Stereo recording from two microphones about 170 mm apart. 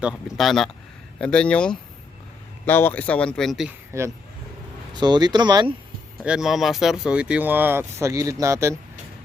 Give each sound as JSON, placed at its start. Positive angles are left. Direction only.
{"t": 0.0, "sound": "speech", "side_deg": 0}
{"t": 3.9, "sound": "speech", "side_deg": -15}
{"t": 6.2, "sound": "speech", "side_deg": -5}